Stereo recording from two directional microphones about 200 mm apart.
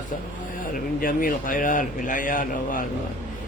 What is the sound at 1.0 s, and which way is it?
A man's voice, 45° left (ahead or behind).